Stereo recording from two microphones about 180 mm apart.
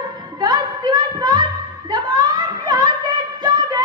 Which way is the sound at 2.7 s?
20° right (ahead or behind).